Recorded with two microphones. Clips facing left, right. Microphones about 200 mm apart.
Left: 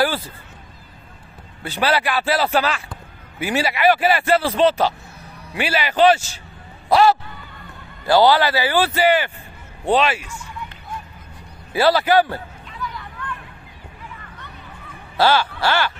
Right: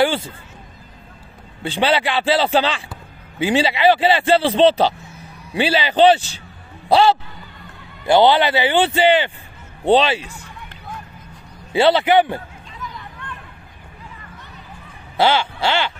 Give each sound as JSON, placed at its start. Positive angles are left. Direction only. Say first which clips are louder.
{"t": 0.0, "sound": "speech", "louder": "right 3 dB", "side_deg": -25}
{"t": 1.6, "sound": "a man's voice", "louder": "right 2 dB", "side_deg": -25}
{"t": 10.3, "sound": "run", "louder": "left 4 dB", "side_deg": -60}
{"t": 11.7, "sound": "a man's voice", "louder": "right 2 dB", "side_deg": -25}
{"t": 12.8, "sound": "a sound", "louder": "left 3 dB", "side_deg": -20}
{"t": 15.1, "sound": "a man's voice", "louder": "even", "side_deg": -25}